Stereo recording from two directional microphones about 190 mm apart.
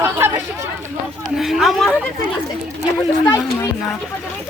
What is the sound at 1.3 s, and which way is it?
Speech, centre (ahead or behind).